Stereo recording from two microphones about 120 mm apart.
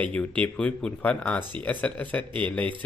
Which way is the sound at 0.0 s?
10° left (ahead or behind).